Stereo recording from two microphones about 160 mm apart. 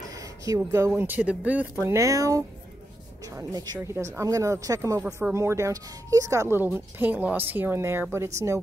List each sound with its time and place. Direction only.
0.1 s speech: 20° right (ahead or behind)